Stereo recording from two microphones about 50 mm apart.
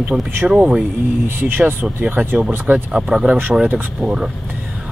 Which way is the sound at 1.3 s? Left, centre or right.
Right.